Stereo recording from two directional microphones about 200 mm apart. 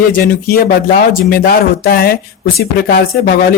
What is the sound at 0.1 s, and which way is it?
Speech, 50° left (ahead or behind).